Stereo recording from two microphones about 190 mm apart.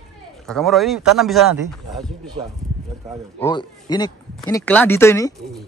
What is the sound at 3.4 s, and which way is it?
Speech, 20° left (ahead or behind).